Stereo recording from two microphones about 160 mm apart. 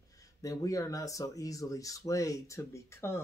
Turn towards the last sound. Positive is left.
turn(degrees=15)  # may be behind; listen again after turning